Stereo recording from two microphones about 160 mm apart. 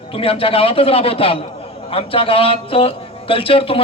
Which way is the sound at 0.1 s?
35° left (ahead or behind).